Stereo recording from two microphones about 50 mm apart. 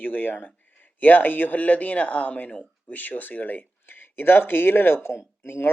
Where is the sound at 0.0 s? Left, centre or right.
Left.